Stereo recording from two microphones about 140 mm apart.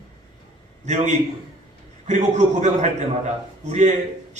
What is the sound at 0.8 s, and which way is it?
A man's voice, 60° right (ahead or behind).